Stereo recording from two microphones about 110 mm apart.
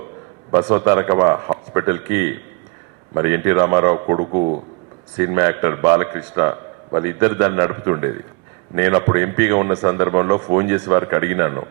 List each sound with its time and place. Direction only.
0.5 s a man's voice: 25° right (ahead or behind)